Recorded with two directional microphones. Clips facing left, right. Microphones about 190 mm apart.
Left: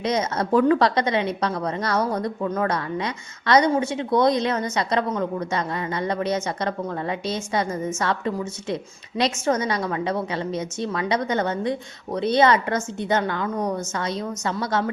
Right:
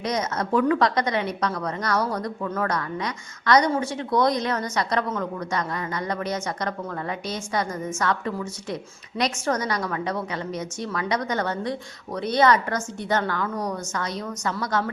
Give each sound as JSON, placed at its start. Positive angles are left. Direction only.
{"t": 0.0, "sound": "a woman's voice", "side_deg": 25}